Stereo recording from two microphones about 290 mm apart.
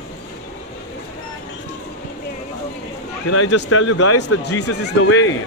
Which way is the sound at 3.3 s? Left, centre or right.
Left.